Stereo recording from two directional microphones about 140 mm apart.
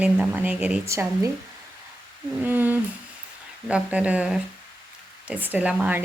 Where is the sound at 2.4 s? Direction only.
15° right (ahead or behind).